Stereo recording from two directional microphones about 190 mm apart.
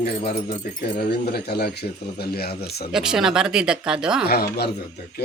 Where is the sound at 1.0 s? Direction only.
55° left (ahead or behind).